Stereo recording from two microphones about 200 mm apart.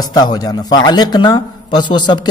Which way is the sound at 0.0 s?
20° left (ahead or behind).